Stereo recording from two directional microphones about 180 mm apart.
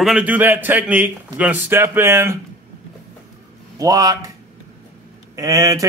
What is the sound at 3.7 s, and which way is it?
Speech, 20° right (ahead or behind).